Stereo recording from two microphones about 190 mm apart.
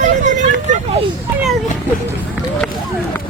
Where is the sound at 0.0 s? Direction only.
40° right (ahead or behind).